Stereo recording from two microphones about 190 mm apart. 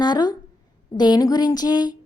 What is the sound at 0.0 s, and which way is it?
A woman's voice, 20° left (ahead or behind).